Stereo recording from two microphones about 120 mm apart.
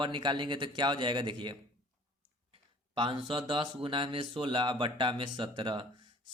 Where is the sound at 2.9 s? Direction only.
45° right (ahead or behind).